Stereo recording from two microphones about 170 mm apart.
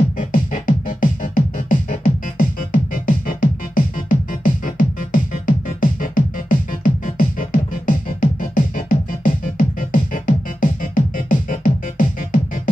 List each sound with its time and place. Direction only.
0.2 s music: 50° left (ahead or behind)